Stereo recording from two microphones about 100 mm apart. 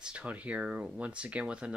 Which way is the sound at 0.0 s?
10° right (ahead or behind).